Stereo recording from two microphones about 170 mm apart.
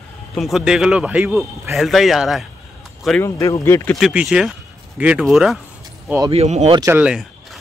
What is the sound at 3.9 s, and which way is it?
Speech, 5° right (ahead or behind).